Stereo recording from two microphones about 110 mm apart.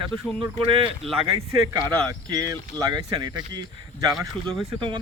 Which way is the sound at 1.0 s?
65° right (ahead or behind).